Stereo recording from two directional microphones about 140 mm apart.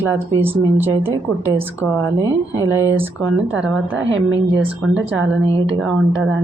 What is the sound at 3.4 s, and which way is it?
Speech, 5° right (ahead or behind).